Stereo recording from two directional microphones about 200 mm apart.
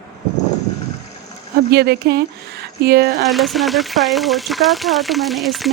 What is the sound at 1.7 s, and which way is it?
Speech, 55° right (ahead or behind).